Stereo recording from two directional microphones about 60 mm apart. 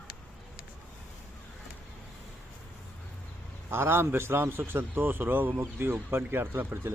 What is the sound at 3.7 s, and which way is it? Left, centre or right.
A man's voice, right.